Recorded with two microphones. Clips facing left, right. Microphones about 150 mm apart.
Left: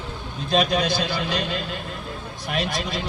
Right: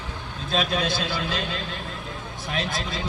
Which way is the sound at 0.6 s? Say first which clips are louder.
Left 4 dB; 40° left (ahead or behind).